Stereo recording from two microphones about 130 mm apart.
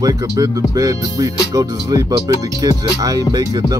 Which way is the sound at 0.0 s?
25° right (ahead or behind).